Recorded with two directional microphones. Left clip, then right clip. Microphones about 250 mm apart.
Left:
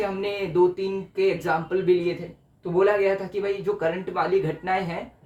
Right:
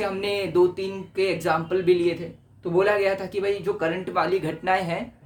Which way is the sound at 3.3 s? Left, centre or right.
Right.